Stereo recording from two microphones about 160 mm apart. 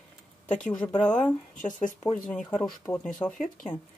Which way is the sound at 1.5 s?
55° left (ahead or behind).